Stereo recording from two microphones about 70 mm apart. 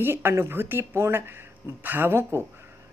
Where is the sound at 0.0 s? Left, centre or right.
Right.